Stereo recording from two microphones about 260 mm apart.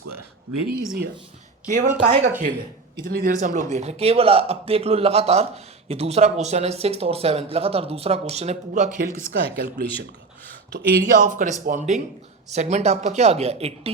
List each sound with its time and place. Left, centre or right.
0.5 s speech: right
1.6 s a man's voice: right